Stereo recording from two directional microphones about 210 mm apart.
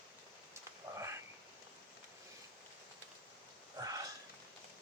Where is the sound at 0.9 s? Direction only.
15° right (ahead or behind).